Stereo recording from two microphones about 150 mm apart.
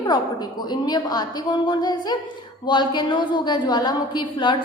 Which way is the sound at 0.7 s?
30° left (ahead or behind).